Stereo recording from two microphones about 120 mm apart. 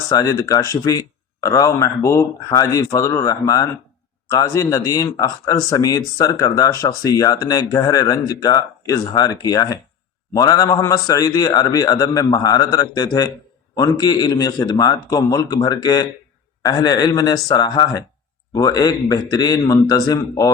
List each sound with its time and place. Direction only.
0.1 s a man's voice: 30° left (ahead or behind)